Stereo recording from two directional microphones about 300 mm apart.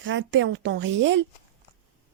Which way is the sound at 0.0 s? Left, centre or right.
Right.